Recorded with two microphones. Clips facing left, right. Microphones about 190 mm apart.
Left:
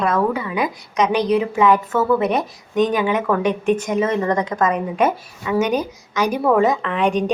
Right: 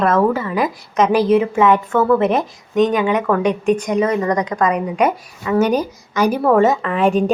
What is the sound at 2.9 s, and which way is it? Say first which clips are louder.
Speech: right 2 dB; 20° right (ahead or behind).